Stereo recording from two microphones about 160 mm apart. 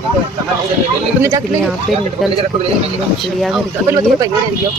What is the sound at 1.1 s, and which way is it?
Speech, 15° right (ahead or behind).